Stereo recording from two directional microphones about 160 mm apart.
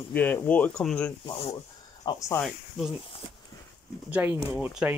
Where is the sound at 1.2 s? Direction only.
30° left (ahead or behind).